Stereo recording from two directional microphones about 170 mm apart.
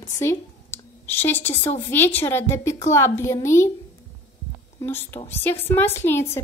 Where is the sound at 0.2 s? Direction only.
15° left (ahead or behind).